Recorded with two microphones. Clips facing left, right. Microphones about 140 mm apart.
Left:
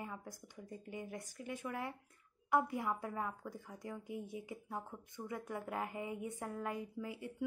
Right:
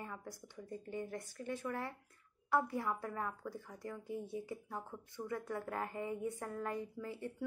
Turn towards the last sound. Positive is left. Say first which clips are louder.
# right 1 dB
turn(degrees=15)  # may be behind; listen again after turning